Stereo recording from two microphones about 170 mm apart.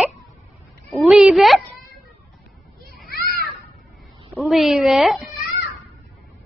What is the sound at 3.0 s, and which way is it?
Children playing, 65° left (ahead or behind).